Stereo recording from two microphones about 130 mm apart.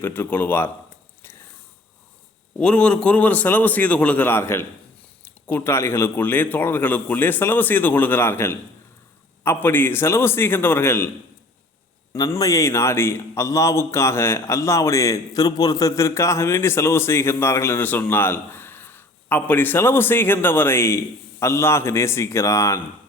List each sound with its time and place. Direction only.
0.0 s a man's voice: 15° left (ahead or behind)
2.6 s a man's voice: 10° left (ahead or behind)
12.1 s a man's voice: 30° left (ahead or behind)